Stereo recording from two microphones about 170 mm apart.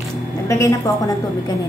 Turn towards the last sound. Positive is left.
turn(degrees=20)  # may be behind; listen again after turning